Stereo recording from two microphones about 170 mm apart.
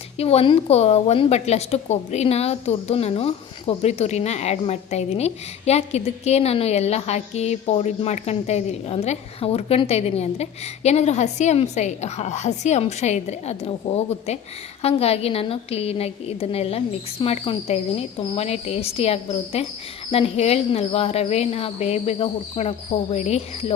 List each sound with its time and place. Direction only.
0.2 s a woman's voice: 35° left (ahead or behind)